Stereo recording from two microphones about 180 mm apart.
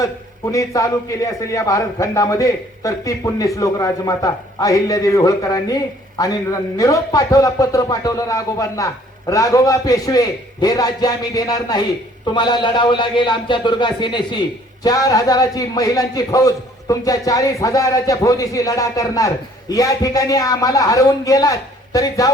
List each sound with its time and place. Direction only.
0.0 s a man's voice: 20° left (ahead or behind)